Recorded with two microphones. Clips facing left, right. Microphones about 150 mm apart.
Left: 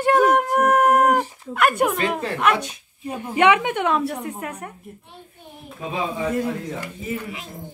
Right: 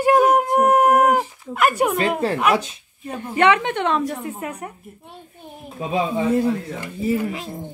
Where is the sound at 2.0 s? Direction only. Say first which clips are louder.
Right 3 dB; 35° right (ahead or behind).